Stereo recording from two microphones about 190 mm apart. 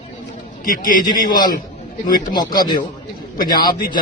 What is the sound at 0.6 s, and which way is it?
A man's voice, 45° left (ahead or behind).